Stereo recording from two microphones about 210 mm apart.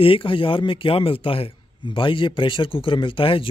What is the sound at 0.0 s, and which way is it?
A man's voice, 25° left (ahead or behind).